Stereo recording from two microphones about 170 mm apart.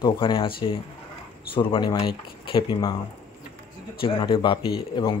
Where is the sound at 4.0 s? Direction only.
30° left (ahead or behind).